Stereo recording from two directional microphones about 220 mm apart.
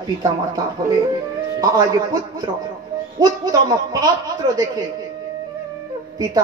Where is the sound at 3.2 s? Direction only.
20° right (ahead or behind).